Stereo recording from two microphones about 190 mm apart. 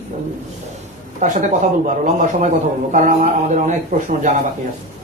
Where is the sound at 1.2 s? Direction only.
40° right (ahead or behind).